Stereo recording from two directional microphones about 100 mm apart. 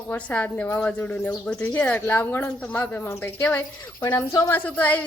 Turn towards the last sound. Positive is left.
turn(degrees=15)  # may be behind; listen again after turning